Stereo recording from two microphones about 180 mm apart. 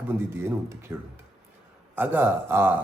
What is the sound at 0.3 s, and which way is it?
Speech, 15° right (ahead or behind).